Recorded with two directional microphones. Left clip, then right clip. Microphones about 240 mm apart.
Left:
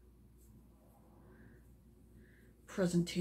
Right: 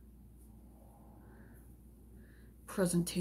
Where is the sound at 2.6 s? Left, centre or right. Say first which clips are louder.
Right 1 dB; centre.